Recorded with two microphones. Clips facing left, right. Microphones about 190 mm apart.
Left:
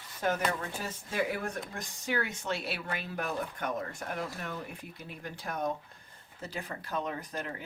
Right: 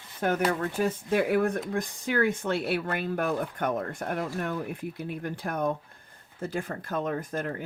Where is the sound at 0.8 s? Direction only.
55° right (ahead or behind).